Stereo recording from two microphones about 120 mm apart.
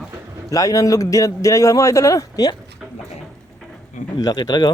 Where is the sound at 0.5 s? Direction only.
30° left (ahead or behind).